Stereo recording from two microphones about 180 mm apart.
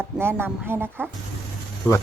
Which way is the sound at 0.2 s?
15° right (ahead or behind).